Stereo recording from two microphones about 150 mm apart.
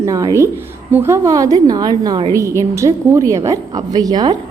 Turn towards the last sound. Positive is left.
turn(degrees=-25)  # may be behind; listen again after turning